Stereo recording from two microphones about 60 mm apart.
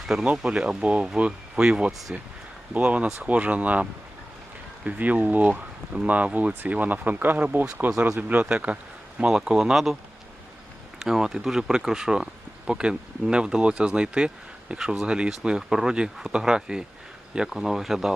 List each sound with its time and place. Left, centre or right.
0.1 s speech: centre
11.0 s speech: centre
14.8 s speech: centre
15.0 s speech: centre